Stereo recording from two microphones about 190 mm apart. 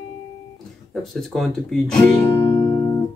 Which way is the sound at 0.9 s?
Centre (ahead or behind).